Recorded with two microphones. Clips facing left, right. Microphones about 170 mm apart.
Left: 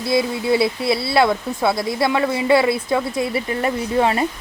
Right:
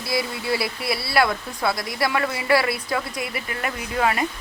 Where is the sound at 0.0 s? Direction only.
25° left (ahead or behind).